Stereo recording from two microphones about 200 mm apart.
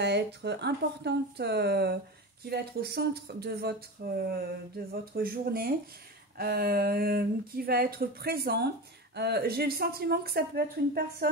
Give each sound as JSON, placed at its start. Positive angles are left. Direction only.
{"t": 0.0, "sound": "speech", "side_deg": -55}